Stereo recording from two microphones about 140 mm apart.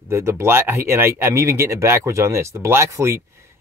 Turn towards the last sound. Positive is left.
turn(degrees=-20)  # may be behind; listen again after turning